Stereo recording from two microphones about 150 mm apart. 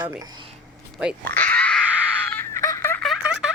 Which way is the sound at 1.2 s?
10° left (ahead or behind).